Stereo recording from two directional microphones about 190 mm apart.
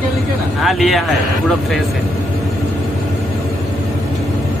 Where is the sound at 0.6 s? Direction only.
Centre (ahead or behind).